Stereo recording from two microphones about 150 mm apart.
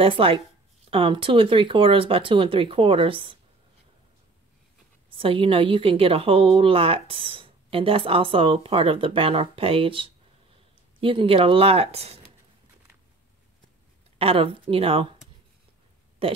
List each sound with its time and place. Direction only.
0.0 s a woman's voice: 40° right (ahead or behind)
5.1 s a woman's voice: 35° right (ahead or behind)
14.1 s a woman's voice: 40° right (ahead or behind)
16.2 s a woman's voice: 35° right (ahead or behind)